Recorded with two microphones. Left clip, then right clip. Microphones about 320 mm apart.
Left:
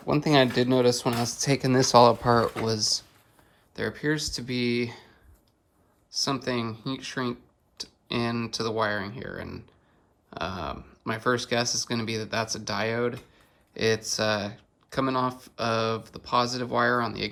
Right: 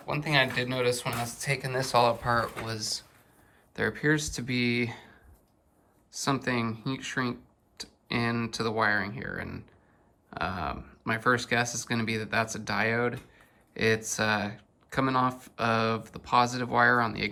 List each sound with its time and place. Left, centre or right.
0.1 s speech: centre
6.1 s speech: centre